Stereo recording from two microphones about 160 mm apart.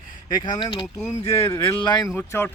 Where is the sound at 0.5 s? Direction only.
30° left (ahead or behind).